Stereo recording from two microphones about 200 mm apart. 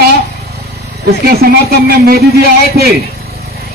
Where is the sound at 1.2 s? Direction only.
50° right (ahead or behind).